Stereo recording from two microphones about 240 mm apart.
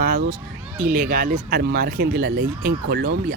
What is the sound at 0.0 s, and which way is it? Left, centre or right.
Speech, right.